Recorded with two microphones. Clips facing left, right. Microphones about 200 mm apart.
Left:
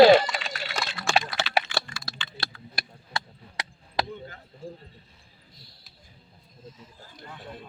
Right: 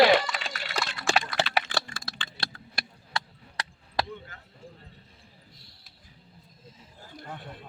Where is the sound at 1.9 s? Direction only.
50° right (ahead or behind).